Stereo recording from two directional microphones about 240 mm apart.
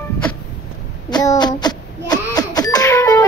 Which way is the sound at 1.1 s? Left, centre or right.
Centre.